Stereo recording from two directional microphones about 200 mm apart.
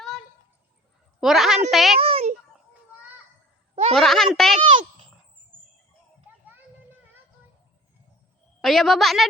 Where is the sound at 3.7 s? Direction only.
30° right (ahead or behind).